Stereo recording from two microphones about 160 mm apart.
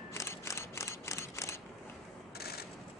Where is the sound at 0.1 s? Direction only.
15° left (ahead or behind).